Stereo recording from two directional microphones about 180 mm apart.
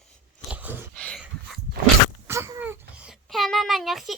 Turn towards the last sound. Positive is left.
turn(degrees=0)  # may be behind; listen again after turning